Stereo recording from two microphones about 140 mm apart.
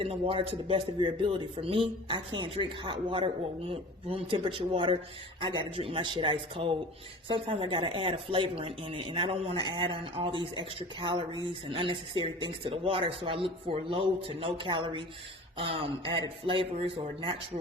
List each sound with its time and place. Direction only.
0.0 s speech: 40° right (ahead or behind)